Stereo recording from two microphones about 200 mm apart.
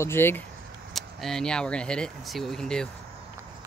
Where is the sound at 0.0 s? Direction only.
10° left (ahead or behind).